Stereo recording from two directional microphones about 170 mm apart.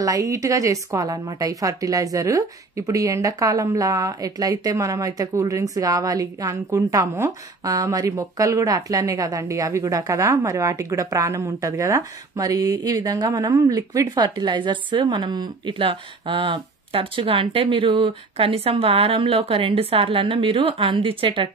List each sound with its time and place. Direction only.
0.0 s a woman's voice: 20° right (ahead or behind)